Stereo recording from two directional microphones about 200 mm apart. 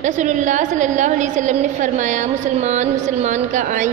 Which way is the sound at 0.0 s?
40° right (ahead or behind).